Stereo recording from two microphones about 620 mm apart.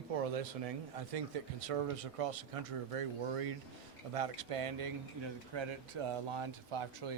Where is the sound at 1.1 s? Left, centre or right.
Right.